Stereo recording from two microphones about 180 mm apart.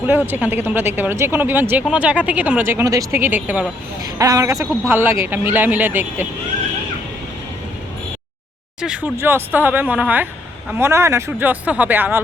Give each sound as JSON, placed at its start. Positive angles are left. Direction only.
{"t": 0.3, "sound": "speech", "side_deg": -10}
{"t": 8.8, "sound": "speech", "side_deg": -5}